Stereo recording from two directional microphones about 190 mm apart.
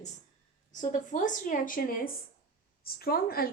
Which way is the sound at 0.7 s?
40° left (ahead or behind).